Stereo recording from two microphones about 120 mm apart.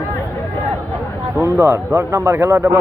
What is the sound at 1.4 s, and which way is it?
Speech, 20° right (ahead or behind).